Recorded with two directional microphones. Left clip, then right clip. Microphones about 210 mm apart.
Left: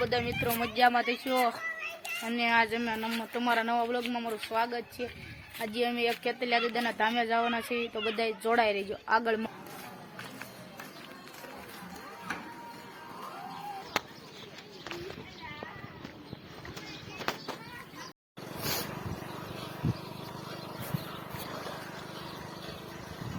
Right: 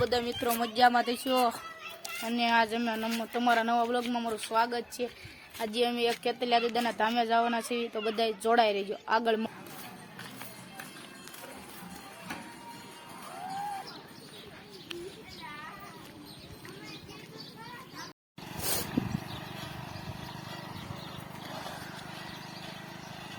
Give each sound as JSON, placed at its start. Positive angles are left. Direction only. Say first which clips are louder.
{"t": 0.0, "sound": "speech", "louder": "right 1 dB", "side_deg": -10}
{"t": 18.6, "sound": "a sound", "louder": "left 1 dB", "side_deg": 0}
{"t": 18.9, "sound": "vehicle", "louder": "right 4 dB", "side_deg": -45}